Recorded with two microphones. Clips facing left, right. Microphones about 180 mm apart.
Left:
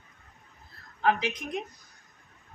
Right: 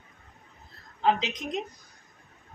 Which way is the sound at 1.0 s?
20° right (ahead or behind).